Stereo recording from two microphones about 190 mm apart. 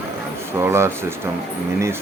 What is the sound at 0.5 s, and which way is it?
Speech, 15° right (ahead or behind).